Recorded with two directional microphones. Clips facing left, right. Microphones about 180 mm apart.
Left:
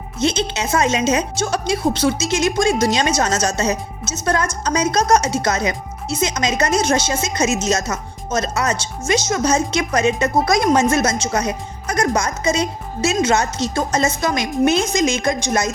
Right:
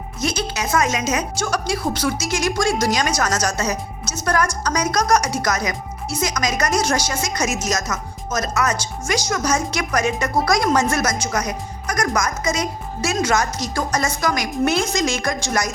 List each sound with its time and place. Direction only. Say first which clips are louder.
0.2 s a woman's voice: left 4 dB; 25° left (ahead or behind)